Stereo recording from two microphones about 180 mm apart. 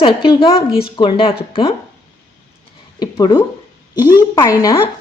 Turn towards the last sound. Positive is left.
turn(degrees=20)  # may be behind; listen again after turning